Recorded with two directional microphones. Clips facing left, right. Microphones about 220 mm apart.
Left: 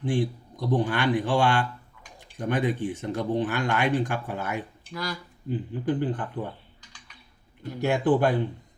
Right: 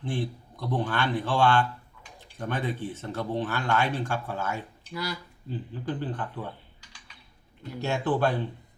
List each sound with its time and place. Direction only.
0.0 s speech: 15° left (ahead or behind)
7.8 s speech: 15° left (ahead or behind)